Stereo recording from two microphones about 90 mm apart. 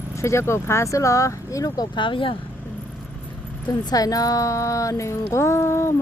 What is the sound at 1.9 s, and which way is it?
Speech, 65° left (ahead or behind).